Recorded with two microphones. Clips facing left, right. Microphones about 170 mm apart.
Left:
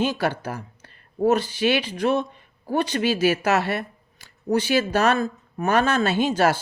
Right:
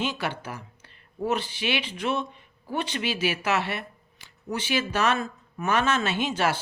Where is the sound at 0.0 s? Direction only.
40° left (ahead or behind).